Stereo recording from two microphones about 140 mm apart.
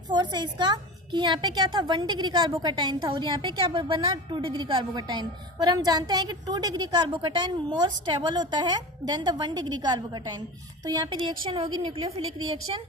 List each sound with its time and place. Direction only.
0.1 s a woman's voice: 30° right (ahead or behind)